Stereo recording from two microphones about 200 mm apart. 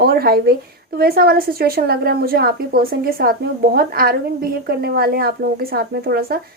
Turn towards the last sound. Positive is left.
turn(degrees=-50)  # may be behind; listen again after turning